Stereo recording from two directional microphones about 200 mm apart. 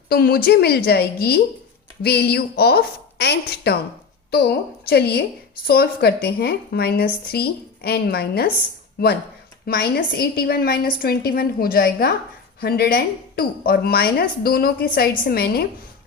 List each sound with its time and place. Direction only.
0.1 s speech: 50° left (ahead or behind)
9.6 s speech: 50° left (ahead or behind)